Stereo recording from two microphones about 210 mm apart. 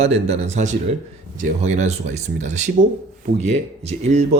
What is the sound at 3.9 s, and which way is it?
Speech, 30° right (ahead or behind).